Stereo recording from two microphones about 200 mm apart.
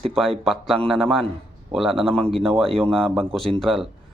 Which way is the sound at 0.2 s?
Centre (ahead or behind).